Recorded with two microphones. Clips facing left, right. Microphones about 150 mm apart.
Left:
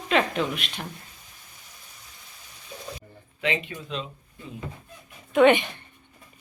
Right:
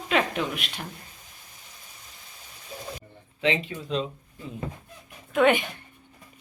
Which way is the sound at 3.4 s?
30° right (ahead or behind).